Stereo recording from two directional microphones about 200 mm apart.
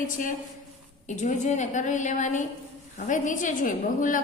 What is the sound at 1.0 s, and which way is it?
A woman's voice, 40° left (ahead or behind).